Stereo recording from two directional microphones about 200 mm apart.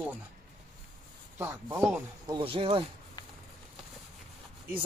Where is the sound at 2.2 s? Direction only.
25° right (ahead or behind).